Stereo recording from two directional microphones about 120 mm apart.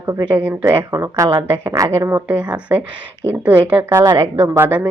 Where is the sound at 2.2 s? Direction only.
10° right (ahead or behind).